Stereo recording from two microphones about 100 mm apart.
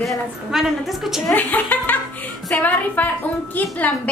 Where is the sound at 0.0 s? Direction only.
Centre (ahead or behind).